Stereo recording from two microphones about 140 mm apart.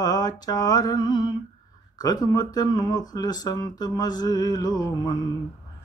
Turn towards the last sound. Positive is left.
turn(degrees=30)  # may be behind; listen again after turning